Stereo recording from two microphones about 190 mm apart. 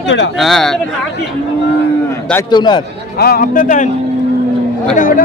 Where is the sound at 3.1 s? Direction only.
55° left (ahead or behind).